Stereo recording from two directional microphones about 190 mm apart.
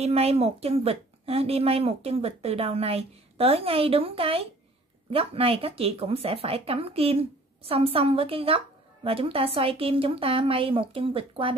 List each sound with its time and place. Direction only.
0.0 s a woman's voice: 30° right (ahead or behind)